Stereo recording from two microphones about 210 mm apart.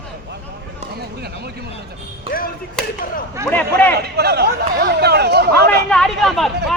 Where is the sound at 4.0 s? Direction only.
50° right (ahead or behind).